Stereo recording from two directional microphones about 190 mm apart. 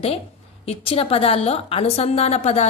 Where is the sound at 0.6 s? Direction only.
30° left (ahead or behind).